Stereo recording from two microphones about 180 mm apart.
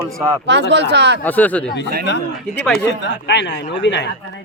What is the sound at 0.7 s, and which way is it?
Speech, 70° right (ahead or behind).